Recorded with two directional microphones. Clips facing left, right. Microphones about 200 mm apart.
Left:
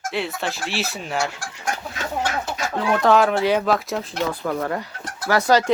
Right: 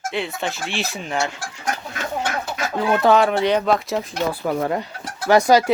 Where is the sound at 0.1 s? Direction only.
Centre (ahead or behind).